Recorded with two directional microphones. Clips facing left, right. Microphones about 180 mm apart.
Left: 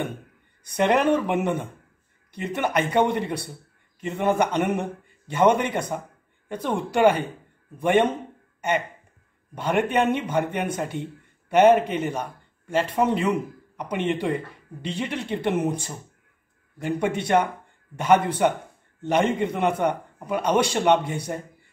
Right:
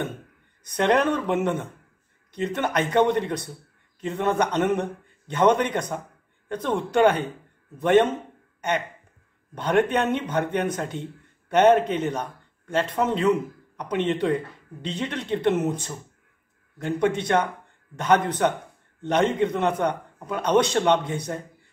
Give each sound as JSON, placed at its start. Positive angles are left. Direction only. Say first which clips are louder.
{"t": 0.7, "sound": "a man's voice", "louder": "left 1 dB", "side_deg": 10}